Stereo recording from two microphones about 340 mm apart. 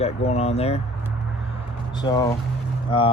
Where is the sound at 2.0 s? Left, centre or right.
Centre.